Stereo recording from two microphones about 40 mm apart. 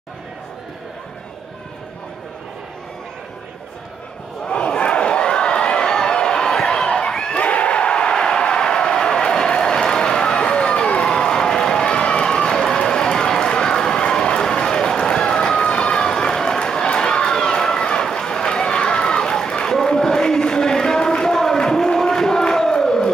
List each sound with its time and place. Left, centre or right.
4.5 s crowd: left
7.4 s a sound: left
10.9 s run: left
11.1 s run: centre